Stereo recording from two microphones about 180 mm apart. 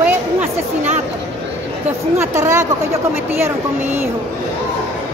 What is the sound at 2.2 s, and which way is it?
Speech, 15° right (ahead or behind).